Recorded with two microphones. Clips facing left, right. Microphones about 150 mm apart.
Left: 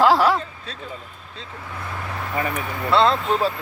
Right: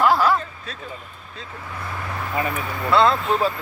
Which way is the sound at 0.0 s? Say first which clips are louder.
Left 2 dB; 85° left.